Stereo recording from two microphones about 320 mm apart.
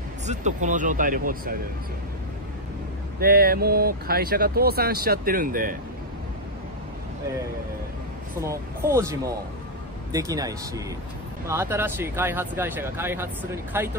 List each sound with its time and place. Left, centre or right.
0.3 s speech: right
3.2 s speech: right
8.4 s speech: centre